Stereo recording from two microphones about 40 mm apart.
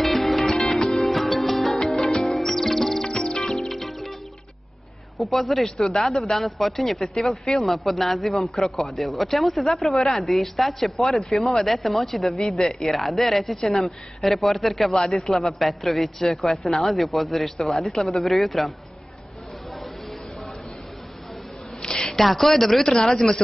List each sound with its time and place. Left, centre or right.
0.0 s music: centre
0.7 s music: centre
1.0 s music: centre
3.5 s music: centre
5.1 s a man's voice: centre
21.8 s a sound: centre
22.1 s a man's voice: centre